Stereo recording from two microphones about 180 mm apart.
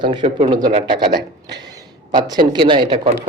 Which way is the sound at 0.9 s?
25° right (ahead or behind).